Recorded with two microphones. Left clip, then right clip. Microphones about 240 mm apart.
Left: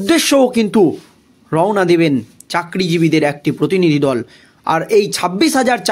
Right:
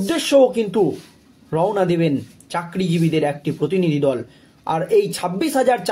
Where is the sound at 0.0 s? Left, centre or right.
Left.